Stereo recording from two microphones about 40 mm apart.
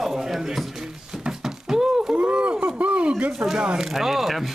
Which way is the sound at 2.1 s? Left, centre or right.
Right.